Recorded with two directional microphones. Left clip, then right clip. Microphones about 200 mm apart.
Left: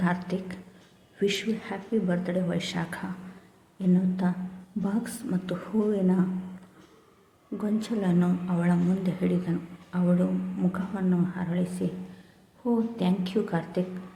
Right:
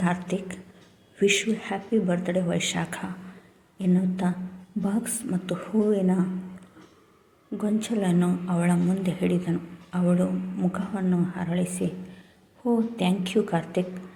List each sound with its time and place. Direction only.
0.0 s a woman's voice: centre (ahead or behind)
7.6 s a woman's voice: centre (ahead or behind)